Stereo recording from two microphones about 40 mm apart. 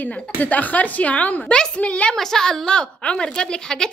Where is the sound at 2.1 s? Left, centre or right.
Centre.